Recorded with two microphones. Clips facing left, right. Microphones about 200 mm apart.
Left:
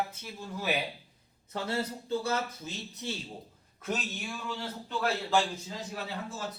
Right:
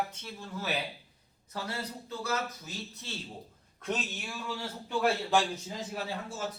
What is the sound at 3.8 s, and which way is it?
Speech, centre (ahead or behind).